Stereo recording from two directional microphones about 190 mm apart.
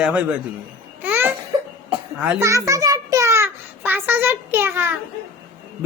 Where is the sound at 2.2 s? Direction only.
10° right (ahead or behind).